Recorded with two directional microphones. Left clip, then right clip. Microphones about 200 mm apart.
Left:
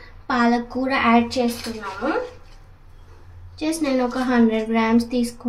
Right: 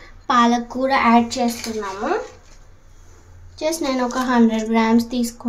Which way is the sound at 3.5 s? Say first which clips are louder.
Right 1 dB; 40° right (ahead or behind).